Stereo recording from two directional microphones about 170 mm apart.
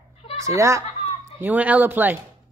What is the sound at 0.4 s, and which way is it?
Speech, 20° right (ahead or behind).